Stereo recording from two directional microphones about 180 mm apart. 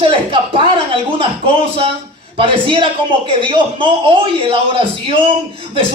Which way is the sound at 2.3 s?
30° right (ahead or behind).